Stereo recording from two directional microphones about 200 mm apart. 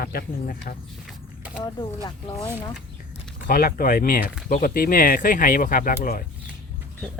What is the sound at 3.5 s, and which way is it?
Speech, 45° left (ahead or behind).